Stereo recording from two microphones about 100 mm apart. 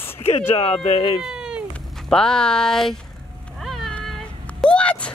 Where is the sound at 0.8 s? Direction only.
60° left (ahead or behind).